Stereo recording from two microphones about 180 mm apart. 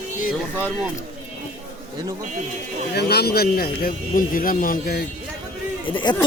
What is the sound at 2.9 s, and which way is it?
Speech, 65° left (ahead or behind).